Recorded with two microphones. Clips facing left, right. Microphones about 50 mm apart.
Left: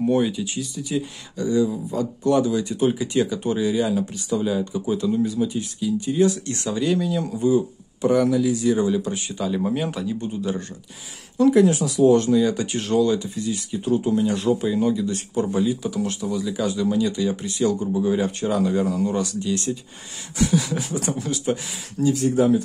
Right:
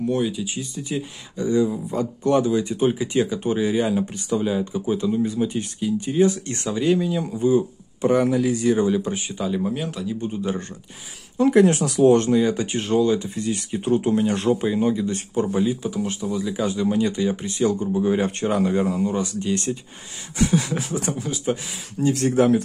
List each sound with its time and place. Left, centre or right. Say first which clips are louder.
0.0 s speech: left 2 dB; centre
0.6 s speech: left 2 dB; right
4.4 s speech: even; centre
5.2 s speech: even; right
9.6 s speech: left 2 dB; centre
10.2 s speech: right 3 dB; centre
11.3 s speech: even; right
11.6 s speech: right 1 dB; right
13.3 s speech: right 1 dB; right
14.6 s speech: even; right
21.1 s speech: left 2 dB; centre
22.0 s speech: even; right